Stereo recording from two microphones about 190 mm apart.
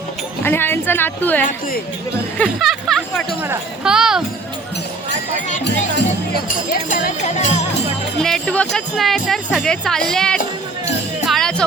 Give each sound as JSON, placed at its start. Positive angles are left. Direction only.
{"t": 0.4, "sound": "a woman's voice", "side_deg": 10}
{"t": 1.5, "sound": "speech", "side_deg": 50}
{"t": 2.4, "sound": "speech", "side_deg": 0}
{"t": 6.8, "sound": "speech", "side_deg": 45}
{"t": 8.2, "sound": "speech", "side_deg": 5}